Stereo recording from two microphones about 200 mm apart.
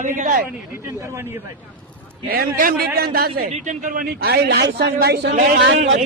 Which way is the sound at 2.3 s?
45° right (ahead or behind).